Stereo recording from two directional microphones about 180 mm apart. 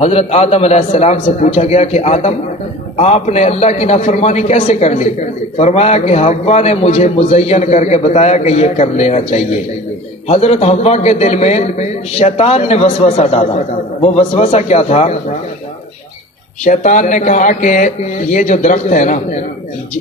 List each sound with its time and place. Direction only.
0.0 s a man's voice: 35° left (ahead or behind)
16.6 s speech: 45° left (ahead or behind)